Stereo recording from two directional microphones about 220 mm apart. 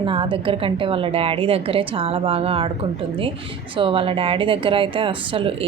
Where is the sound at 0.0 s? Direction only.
25° right (ahead or behind).